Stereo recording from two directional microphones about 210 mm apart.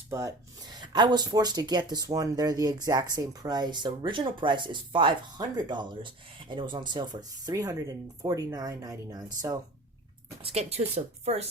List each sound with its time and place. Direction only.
0.1 s speech: 15° right (ahead or behind)
10.4 s speech: 30° right (ahead or behind)